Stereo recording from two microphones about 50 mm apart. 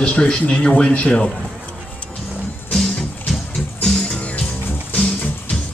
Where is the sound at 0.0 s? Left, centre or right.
Left.